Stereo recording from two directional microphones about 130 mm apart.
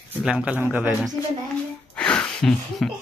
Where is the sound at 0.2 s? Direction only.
10° right (ahead or behind).